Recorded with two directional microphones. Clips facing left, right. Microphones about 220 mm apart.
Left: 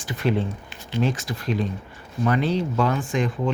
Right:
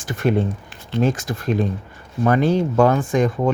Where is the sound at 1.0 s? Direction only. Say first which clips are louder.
Right 5 dB; 50° right (ahead or behind).